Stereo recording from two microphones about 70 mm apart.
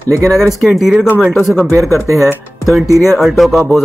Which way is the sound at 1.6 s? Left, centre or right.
Right.